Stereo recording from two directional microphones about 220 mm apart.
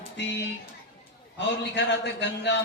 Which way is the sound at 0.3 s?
50° left (ahead or behind).